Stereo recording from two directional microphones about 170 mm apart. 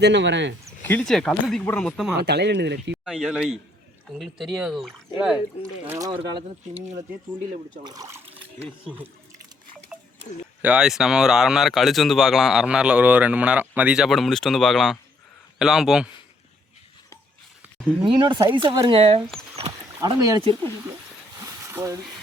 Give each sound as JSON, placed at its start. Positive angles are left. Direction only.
{"t": 0.0, "sound": "speech", "side_deg": -90}
{"t": 0.8, "sound": "speech", "side_deg": 10}
{"t": 2.1, "sound": "speech", "side_deg": -75}
{"t": 3.0, "sound": "speech", "side_deg": 0}
{"t": 7.9, "sound": "speech", "side_deg": -20}
{"t": 10.6, "sound": "speech", "side_deg": -5}
{"t": 18.0, "sound": "speech", "side_deg": -30}
{"t": 20.0, "sound": "speech", "side_deg": -20}
{"t": 21.7, "sound": "speech", "side_deg": -15}